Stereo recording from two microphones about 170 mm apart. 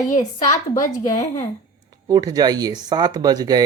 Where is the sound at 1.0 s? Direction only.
40° left (ahead or behind).